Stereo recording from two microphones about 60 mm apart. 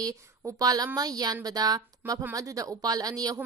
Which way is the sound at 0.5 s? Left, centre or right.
Right.